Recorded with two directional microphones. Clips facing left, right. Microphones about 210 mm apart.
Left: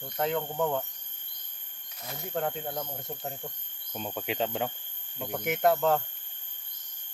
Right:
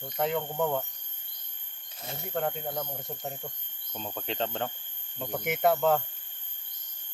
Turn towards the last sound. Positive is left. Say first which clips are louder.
# even
turn(degrees=0)  # may be behind; listen again after turning